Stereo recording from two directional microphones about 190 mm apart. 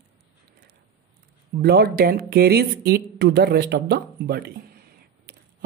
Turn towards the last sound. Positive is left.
turn(degrees=-50)  # may be behind; listen again after turning